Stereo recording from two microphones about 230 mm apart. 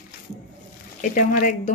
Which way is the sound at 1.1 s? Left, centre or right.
Left.